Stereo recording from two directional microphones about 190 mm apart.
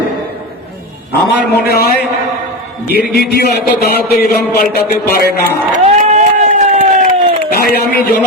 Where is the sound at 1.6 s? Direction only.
55° left (ahead or behind).